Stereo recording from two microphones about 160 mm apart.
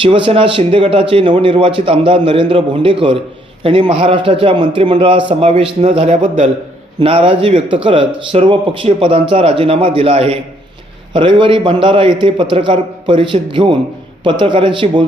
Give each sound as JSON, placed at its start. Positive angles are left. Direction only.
{"t": 0.0, "sound": "a man's voice", "side_deg": -35}
{"t": 7.0, "sound": "a man's voice", "side_deg": -35}